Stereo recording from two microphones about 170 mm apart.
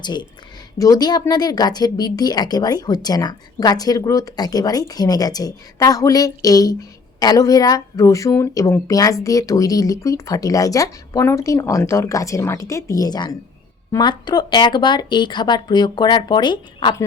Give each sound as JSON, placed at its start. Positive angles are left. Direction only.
{"t": 0.0, "sound": "speech", "side_deg": 25}